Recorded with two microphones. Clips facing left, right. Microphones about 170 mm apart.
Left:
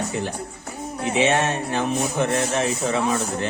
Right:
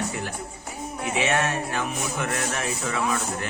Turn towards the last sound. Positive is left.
turn(degrees=30)  # may be behind; listen again after turning